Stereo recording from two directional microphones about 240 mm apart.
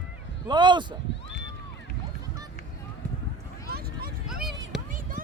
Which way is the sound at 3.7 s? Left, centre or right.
Right.